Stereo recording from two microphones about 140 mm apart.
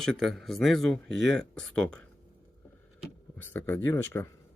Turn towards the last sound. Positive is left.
turn(degrees=15)  # may be behind; listen again after turning